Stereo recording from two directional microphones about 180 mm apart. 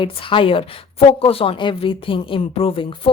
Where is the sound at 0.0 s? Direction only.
30° left (ahead or behind).